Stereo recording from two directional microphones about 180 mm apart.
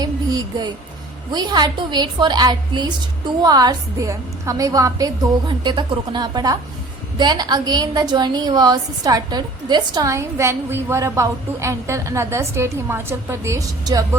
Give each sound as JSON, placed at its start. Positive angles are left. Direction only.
{"t": 0.0, "sound": "a woman's voice", "side_deg": -20}